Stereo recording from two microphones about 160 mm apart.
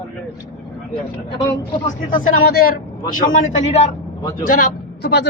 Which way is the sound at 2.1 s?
65° left (ahead or behind).